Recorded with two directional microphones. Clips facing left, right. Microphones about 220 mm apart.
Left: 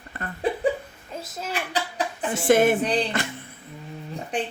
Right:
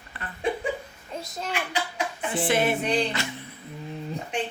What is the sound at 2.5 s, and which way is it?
Music, 45° left (ahead or behind).